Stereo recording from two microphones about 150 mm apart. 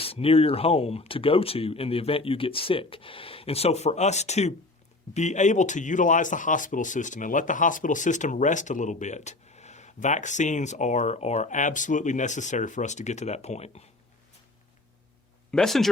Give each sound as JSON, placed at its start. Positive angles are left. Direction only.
{"t": 0.0, "sound": "speech", "side_deg": 40}
{"t": 15.5, "sound": "speech", "side_deg": 0}